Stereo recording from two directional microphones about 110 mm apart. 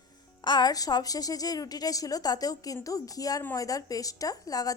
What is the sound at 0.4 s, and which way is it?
A woman's voice, 40° left (ahead or behind).